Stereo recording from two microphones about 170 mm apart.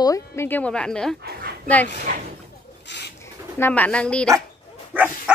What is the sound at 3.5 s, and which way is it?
Speech, 10° left (ahead or behind).